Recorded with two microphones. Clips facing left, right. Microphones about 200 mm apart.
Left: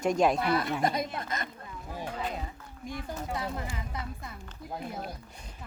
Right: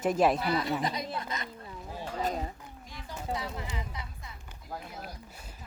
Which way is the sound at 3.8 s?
55° left (ahead or behind).